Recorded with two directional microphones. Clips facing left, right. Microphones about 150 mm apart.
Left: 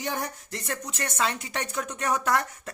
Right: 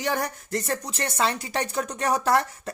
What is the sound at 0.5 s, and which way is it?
Speech, 35° right (ahead or behind).